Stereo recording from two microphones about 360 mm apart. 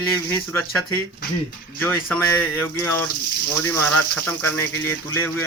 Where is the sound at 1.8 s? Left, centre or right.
Centre.